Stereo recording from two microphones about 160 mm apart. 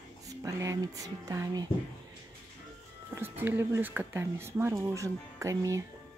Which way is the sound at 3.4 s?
15° right (ahead or behind).